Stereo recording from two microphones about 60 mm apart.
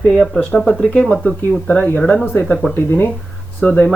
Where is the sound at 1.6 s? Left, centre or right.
Left.